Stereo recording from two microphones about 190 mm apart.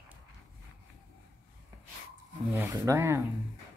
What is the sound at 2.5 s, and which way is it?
Speech, 15° right (ahead or behind).